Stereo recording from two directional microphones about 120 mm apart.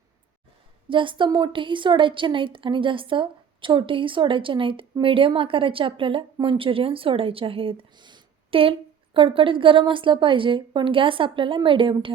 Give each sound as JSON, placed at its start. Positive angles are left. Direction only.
{"t": 0.9, "sound": "a woman's voice", "side_deg": -45}